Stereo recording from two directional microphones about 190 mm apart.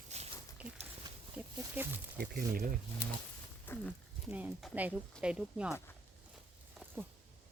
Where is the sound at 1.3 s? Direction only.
10° right (ahead or behind).